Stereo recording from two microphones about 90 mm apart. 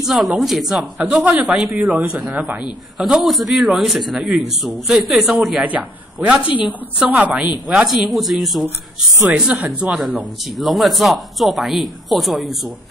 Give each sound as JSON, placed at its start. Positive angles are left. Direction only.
{"t": 0.0, "sound": "a woman's voice", "side_deg": 0}
{"t": 5.6, "sound": "a woman's voice", "side_deg": -15}
{"t": 7.6, "sound": "speech", "side_deg": -5}